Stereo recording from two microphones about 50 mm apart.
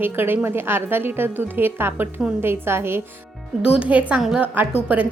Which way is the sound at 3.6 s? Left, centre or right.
Right.